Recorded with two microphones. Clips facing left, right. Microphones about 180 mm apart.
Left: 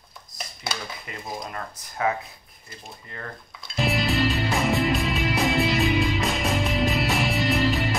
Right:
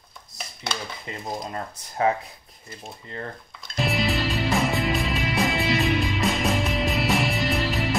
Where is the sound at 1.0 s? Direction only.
25° right (ahead or behind).